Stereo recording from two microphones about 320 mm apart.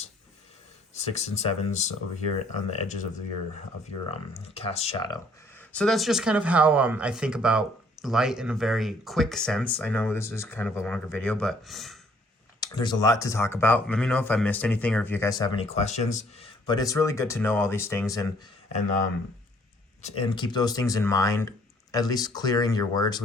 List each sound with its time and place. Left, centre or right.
0.9 s speech: left
4.4 s speech: centre
12.5 s speech: centre
20.0 s speech: centre